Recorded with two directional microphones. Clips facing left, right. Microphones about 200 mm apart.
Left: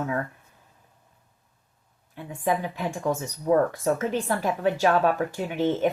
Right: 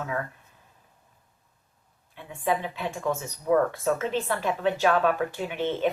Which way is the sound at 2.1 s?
45° left (ahead or behind).